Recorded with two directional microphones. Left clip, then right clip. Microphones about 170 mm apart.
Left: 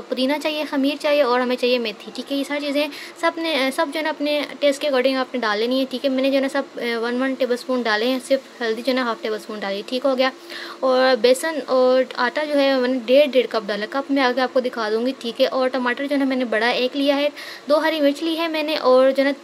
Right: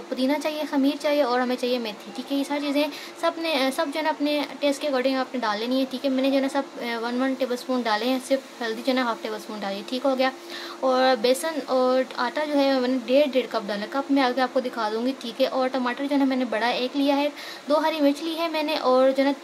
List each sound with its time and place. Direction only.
0.1 s a woman's voice: 20° left (ahead or behind)